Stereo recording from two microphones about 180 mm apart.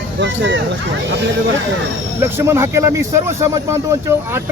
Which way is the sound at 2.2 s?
10° right (ahead or behind).